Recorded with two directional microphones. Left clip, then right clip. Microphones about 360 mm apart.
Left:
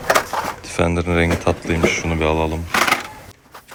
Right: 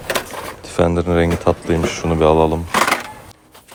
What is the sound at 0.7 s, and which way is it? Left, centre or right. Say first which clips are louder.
Speech: right 6 dB; centre.